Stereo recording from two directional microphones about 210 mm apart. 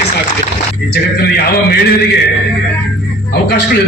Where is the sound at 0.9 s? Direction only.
50° left (ahead or behind).